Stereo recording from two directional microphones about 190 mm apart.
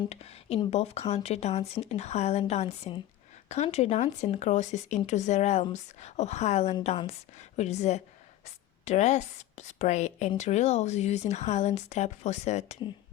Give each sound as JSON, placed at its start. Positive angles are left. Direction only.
{"t": 0.0, "sound": "speech", "side_deg": 35}